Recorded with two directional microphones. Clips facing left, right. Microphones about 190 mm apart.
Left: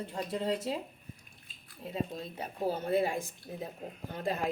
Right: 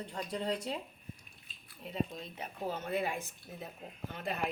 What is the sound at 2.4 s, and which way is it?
Speech, 35° left (ahead or behind).